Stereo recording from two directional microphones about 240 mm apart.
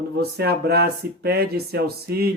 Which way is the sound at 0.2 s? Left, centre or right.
Right.